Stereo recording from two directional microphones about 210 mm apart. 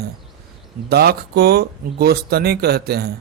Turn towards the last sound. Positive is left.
turn(degrees=-50)  # may be behind; listen again after turning